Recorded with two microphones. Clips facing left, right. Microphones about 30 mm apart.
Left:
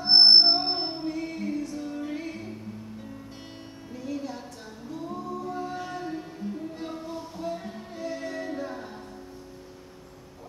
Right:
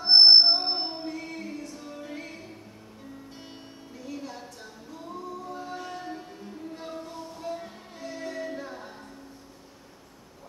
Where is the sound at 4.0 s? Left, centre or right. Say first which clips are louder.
Left 4 dB; centre.